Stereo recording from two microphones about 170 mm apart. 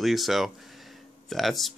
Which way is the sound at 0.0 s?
Centre (ahead or behind).